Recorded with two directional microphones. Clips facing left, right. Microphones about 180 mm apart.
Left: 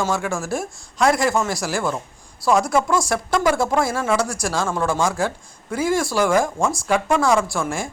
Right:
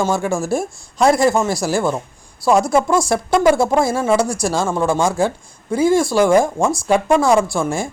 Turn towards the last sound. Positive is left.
turn(degrees=-25)  # may be behind; listen again after turning